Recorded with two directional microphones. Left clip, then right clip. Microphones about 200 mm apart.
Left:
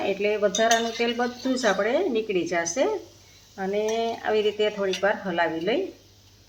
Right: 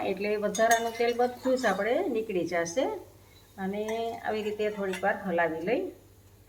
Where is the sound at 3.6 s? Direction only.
50° left (ahead or behind).